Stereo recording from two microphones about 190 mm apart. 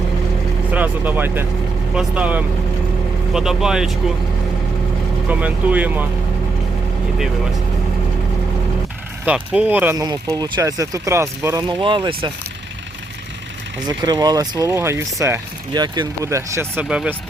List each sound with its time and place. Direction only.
0.7 s speech: 10° right (ahead or behind)
5.3 s speech: 10° right (ahead or behind)
9.2 s speech: 5° right (ahead or behind); by 12.3 s 25° right (ahead or behind)
13.8 s speech: 20° right (ahead or behind)